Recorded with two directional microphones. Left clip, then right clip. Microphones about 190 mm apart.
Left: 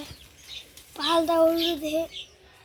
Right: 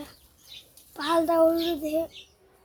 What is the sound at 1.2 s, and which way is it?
Speech, 10° right (ahead or behind).